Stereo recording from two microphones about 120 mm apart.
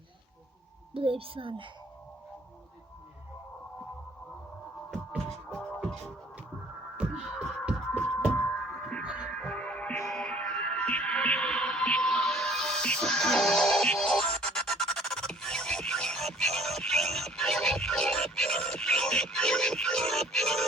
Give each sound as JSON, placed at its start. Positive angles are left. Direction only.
{"t": 0.9, "sound": "a child's voice", "side_deg": -50}
{"t": 4.9, "sound": "music", "side_deg": 5}
{"t": 6.9, "sound": "music", "side_deg": -10}
{"t": 7.9, "sound": "music", "side_deg": 5}
{"t": 9.0, "sound": "music", "side_deg": -5}
{"t": 9.3, "sound": "music", "side_deg": 10}